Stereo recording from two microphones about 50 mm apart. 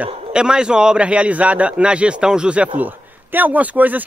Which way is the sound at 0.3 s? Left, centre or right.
Centre.